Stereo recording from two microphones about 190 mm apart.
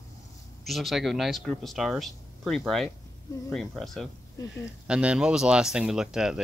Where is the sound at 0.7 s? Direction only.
Centre (ahead or behind).